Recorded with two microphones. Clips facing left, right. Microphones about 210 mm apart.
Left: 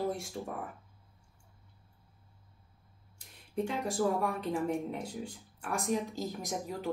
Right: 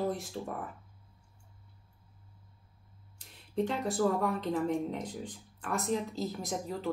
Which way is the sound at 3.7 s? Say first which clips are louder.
Right 1 dB; 10° left (ahead or behind).